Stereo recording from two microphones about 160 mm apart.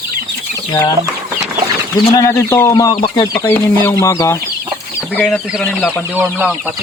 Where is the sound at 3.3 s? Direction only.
10° left (ahead or behind).